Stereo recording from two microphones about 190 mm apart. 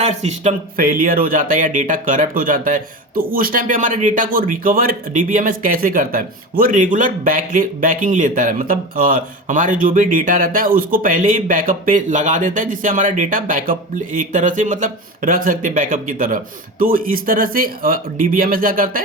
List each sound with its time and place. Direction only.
0.0 s speech: 35° right (ahead or behind)